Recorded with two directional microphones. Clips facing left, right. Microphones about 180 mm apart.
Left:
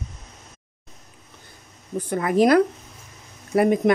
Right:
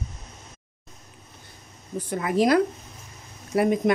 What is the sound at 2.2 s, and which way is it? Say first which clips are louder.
Speech: left 3 dB; 60° left (ahead or behind).